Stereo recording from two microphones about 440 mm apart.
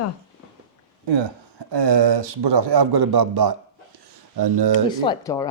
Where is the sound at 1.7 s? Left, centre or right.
Right.